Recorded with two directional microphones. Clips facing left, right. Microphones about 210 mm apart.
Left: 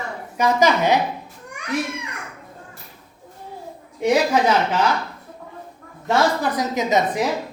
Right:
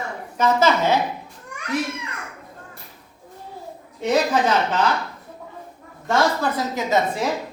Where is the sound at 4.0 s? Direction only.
10° left (ahead or behind).